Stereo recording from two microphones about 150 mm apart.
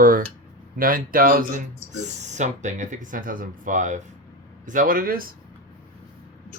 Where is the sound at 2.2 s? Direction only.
50° right (ahead or behind); by 5.3 s 70° right (ahead or behind).